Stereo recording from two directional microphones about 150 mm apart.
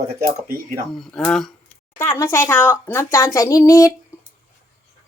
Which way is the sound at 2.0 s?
15° left (ahead or behind).